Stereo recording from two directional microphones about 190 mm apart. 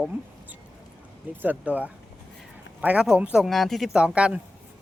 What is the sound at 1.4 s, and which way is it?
Speech, 10° right (ahead or behind).